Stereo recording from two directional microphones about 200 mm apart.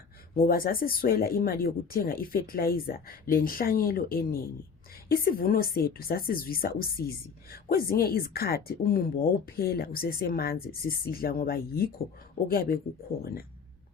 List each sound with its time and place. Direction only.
0.3 s a woman's voice: 45° left (ahead or behind)